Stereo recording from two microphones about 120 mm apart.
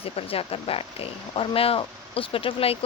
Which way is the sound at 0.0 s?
50° left (ahead or behind).